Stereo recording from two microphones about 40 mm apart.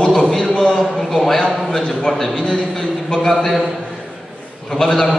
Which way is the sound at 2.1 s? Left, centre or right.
Centre.